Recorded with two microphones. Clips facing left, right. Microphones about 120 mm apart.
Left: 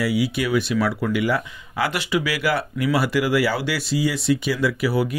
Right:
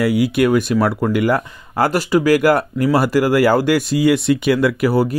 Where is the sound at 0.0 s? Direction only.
50° right (ahead or behind).